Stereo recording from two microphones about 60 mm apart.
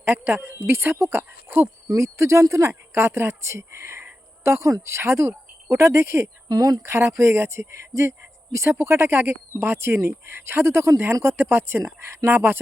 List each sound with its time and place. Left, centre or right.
0.0 s speech: right
2.0 s speech: right
6.5 s speech: right
6.8 s speech: right